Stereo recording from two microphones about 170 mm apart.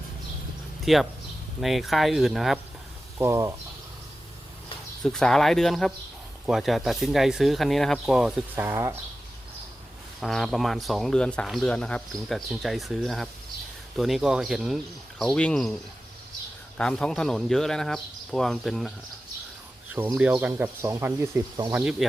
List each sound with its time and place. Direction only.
0.9 s speech: centre (ahead or behind)
3.2 s speech: 15° right (ahead or behind)
5.0 s speech: centre (ahead or behind)
8.6 s speech: 15° right (ahead or behind)
10.2 s speech: centre (ahead or behind)
16.7 s speech: 5° left (ahead or behind)
20.1 s speech: 10° right (ahead or behind)